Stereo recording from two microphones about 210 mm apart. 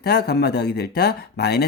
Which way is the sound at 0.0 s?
50° left (ahead or behind).